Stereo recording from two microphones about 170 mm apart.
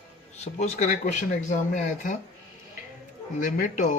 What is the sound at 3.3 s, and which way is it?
Speech, 50° left (ahead or behind).